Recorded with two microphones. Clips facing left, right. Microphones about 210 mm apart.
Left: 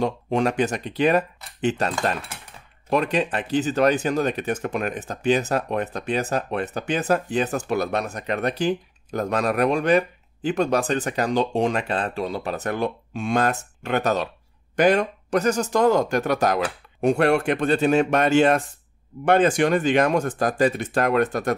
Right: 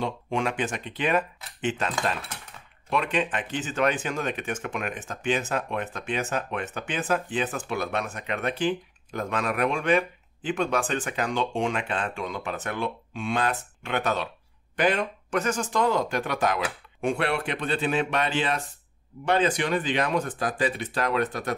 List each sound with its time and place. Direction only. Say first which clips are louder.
0.0 s speech: left 6 dB; 40° left (ahead or behind)